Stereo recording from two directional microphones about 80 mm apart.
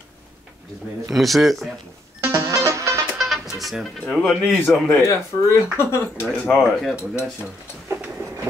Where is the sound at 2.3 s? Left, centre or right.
Right.